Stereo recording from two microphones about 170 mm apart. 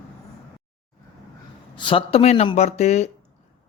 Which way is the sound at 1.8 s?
30° left (ahead or behind).